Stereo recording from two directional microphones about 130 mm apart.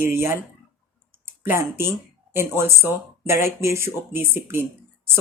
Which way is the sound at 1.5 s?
15° right (ahead or behind).